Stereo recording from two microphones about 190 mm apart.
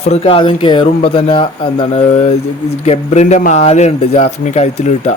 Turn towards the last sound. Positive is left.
turn(degrees=35)  # may be behind; listen again after turning